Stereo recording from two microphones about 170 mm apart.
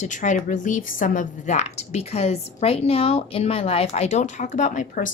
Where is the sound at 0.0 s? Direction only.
45° left (ahead or behind).